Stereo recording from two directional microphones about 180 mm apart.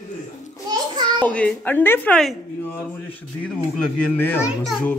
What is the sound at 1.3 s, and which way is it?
A woman's voice, 5° left (ahead or behind).